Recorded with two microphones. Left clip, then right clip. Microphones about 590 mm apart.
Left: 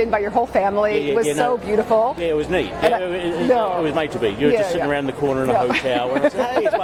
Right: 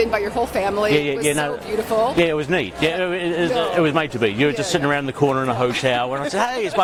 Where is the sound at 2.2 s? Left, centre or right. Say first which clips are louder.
Even; right.